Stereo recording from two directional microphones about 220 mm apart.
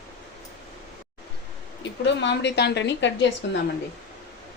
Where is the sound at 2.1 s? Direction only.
55° left (ahead or behind).